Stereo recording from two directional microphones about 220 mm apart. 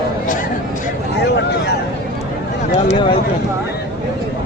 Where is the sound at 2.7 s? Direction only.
30° left (ahead or behind).